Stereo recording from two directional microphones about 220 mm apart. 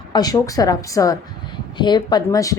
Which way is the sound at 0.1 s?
15° left (ahead or behind).